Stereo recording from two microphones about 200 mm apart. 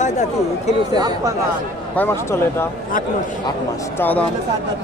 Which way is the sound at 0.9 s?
20° right (ahead or behind).